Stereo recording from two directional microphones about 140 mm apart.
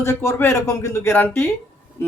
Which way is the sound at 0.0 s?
20° left (ahead or behind).